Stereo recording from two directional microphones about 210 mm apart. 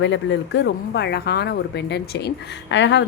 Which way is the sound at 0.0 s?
60° left (ahead or behind).